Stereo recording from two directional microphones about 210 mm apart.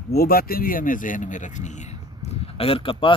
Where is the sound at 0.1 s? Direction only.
45° left (ahead or behind).